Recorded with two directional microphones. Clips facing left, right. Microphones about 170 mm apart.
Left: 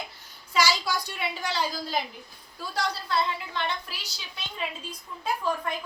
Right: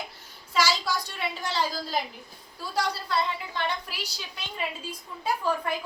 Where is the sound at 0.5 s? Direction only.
Centre (ahead or behind).